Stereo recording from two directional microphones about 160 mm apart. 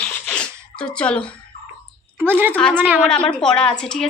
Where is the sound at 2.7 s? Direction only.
10° right (ahead or behind).